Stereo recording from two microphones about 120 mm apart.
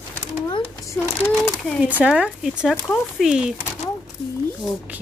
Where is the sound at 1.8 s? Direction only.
10° right (ahead or behind).